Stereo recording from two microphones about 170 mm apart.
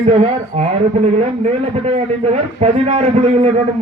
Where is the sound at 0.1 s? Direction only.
35° right (ahead or behind).